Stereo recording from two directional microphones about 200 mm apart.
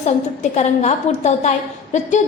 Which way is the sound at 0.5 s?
35° left (ahead or behind).